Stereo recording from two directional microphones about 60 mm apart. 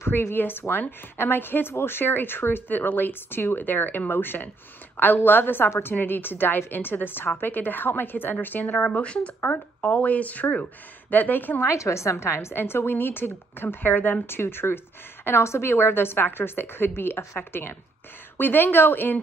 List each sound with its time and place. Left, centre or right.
0.0 s speech: left
11.6 s speech: left